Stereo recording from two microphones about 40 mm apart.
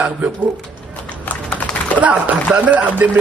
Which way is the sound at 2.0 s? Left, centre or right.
Right.